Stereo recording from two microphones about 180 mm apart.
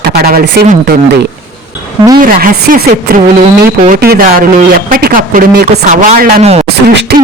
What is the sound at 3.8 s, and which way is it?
A man's voice, 55° right (ahead or behind).